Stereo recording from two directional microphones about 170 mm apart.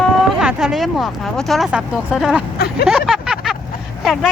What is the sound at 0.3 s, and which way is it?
Speech, 5° right (ahead or behind).